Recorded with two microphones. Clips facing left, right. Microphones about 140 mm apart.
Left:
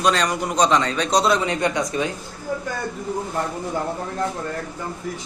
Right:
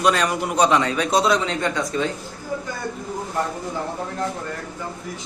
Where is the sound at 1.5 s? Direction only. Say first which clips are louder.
Left 1 dB; 15° left (ahead or behind).